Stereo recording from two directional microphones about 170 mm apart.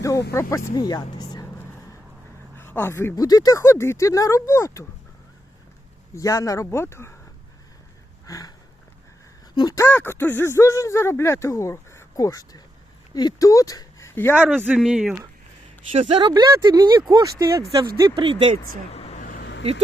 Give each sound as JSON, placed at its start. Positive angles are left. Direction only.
{"t": 0.0, "sound": "speech", "side_deg": 20}
{"t": 2.6, "sound": "speech", "side_deg": 10}
{"t": 6.1, "sound": "speech", "side_deg": 20}
{"t": 8.3, "sound": "a sound", "side_deg": 20}
{"t": 9.6, "sound": "speech", "side_deg": 20}
{"t": 14.3, "sound": "speech", "side_deg": -10}
{"t": 15.9, "sound": "speech", "side_deg": -35}
{"t": 16.2, "sound": "speech", "side_deg": -25}
{"t": 18.2, "sound": "speech", "side_deg": -35}
{"t": 18.9, "sound": "vehicle", "side_deg": 35}
{"t": 19.4, "sound": "vehicle", "side_deg": 90}